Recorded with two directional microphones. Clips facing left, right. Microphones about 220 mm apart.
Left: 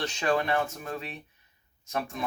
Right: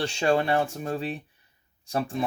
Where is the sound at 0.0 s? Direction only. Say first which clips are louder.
Right 4 dB; 30° right (ahead or behind).